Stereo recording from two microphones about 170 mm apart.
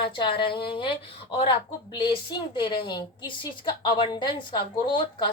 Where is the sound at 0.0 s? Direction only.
30° left (ahead or behind).